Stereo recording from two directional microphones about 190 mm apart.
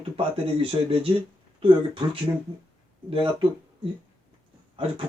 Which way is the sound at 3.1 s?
30° right (ahead or behind).